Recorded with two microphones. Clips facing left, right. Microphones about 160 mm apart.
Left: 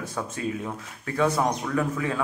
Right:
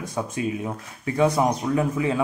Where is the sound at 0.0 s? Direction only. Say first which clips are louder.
Right 3 dB; 15° right (ahead or behind).